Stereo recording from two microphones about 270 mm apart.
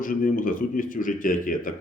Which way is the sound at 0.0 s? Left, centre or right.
Left.